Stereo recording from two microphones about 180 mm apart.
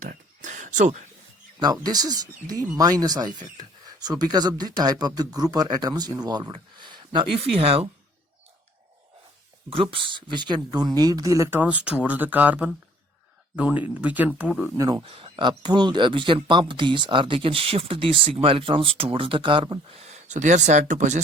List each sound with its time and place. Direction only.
0.0 s a sound: 45° right (ahead or behind)
1.5 s speech: 20° right (ahead or behind)
9.6 s speech: 30° right (ahead or behind); by 14.7 s 5° right (ahead or behind)
14.8 s speech: 20° right (ahead or behind)
15.0 s speech: 30° right (ahead or behind)